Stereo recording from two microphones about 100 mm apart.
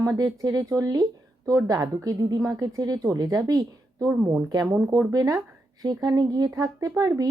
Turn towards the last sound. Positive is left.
turn(degrees=-40)  # may be behind; listen again after turning